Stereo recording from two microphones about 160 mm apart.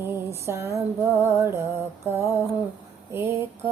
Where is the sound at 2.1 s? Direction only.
10° right (ahead or behind).